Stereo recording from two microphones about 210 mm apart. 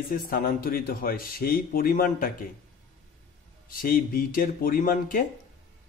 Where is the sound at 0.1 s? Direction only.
45° left (ahead or behind).